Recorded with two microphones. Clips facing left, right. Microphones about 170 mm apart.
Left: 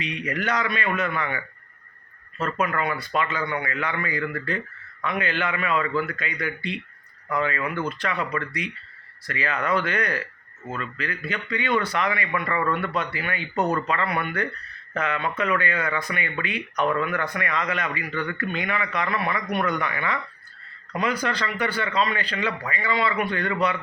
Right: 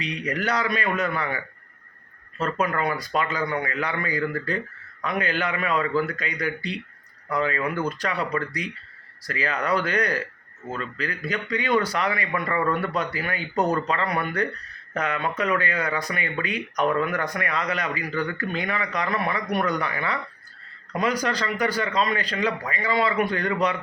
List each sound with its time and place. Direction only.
0.0 s speech: 35° right (ahead or behind)
2.4 s speech: 35° right (ahead or behind)